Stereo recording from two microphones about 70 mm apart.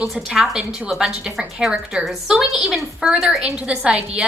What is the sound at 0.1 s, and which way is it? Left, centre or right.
A woman's voice, centre.